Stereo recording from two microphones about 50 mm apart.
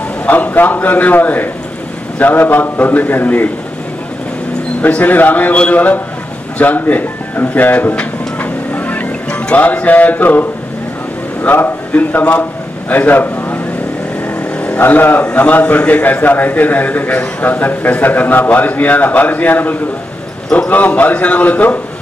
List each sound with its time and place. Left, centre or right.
0.3 s a man's voice: left
4.8 s a man's voice: left
7.9 s a sound: left
8.7 s vehicle: left
9.6 s a man's voice: left
11.4 s a man's voice: left
14.8 s a man's voice: left